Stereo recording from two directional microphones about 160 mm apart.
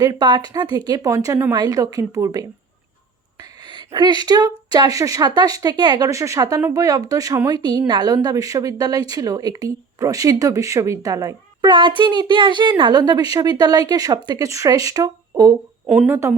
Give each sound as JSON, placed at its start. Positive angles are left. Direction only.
{"t": 0.0, "sound": "speech", "side_deg": -25}
{"t": 3.7, "sound": "speech", "side_deg": -30}
{"t": 15.9, "sound": "speech", "side_deg": -10}